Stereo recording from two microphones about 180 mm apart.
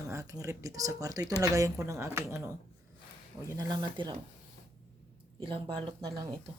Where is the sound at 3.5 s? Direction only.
20° right (ahead or behind).